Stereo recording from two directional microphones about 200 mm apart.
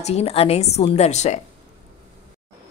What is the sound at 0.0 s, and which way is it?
A woman's voice, 30° left (ahead or behind).